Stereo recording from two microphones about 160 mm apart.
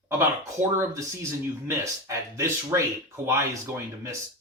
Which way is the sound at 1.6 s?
20° right (ahead or behind).